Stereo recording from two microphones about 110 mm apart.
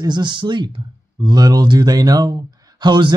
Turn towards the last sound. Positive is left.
turn(degrees=-45)  # may be behind; listen again after turning